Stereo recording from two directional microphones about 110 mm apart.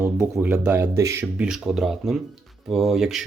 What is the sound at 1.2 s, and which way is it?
Speech, 5° right (ahead or behind).